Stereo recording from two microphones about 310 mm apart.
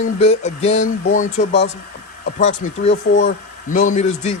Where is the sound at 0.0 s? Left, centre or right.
Left.